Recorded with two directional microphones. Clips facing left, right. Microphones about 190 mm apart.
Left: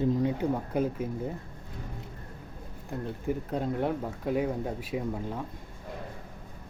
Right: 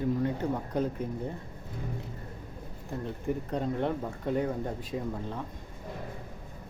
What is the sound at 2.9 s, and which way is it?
Speech, centre (ahead or behind).